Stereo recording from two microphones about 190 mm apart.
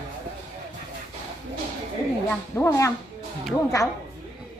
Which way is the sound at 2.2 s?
15° left (ahead or behind).